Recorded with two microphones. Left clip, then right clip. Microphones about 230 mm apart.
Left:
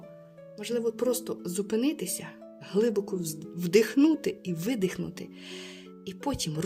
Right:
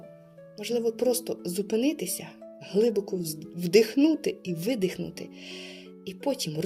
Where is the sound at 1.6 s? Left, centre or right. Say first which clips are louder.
Right 2 dB; centre.